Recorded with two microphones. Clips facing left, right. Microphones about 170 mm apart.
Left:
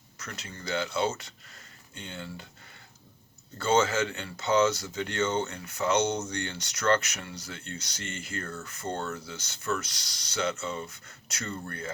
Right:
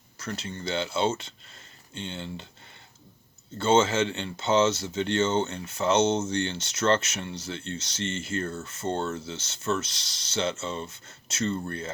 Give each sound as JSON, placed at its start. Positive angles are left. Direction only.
{"t": 0.2, "sound": "speech", "side_deg": -30}
{"t": 3.6, "sound": "speech", "side_deg": -25}